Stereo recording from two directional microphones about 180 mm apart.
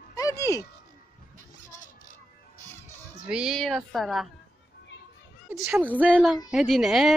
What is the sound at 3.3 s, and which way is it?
Speech, 5° right (ahead or behind).